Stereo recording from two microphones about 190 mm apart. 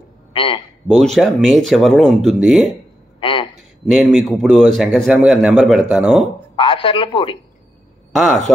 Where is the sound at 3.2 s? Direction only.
25° left (ahead or behind).